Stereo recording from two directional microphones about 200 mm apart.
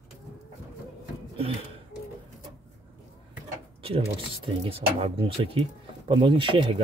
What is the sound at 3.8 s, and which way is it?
Speech, 30° right (ahead or behind).